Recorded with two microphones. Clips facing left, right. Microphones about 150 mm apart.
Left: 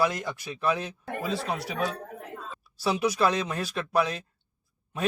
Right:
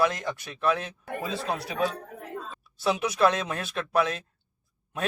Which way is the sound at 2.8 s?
Centre (ahead or behind).